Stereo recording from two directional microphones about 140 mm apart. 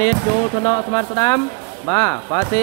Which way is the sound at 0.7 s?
25° left (ahead or behind).